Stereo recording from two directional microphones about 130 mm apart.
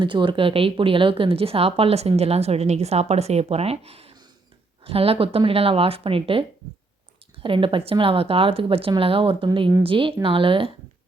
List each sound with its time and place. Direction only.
0.0 s speech: 40° right (ahead or behind)
7.4 s a woman's voice: 40° right (ahead or behind)